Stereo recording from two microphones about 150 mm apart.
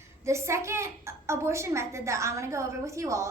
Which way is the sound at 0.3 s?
20° right (ahead or behind).